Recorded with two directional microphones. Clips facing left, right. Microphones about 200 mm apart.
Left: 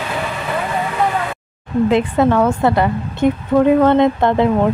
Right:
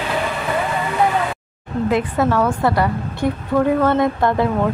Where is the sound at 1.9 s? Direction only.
25° left (ahead or behind).